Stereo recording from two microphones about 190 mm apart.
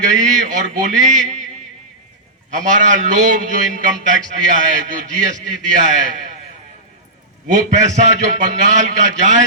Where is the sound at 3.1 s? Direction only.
40° right (ahead or behind).